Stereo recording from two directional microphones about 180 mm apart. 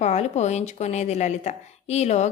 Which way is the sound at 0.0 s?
40° left (ahead or behind).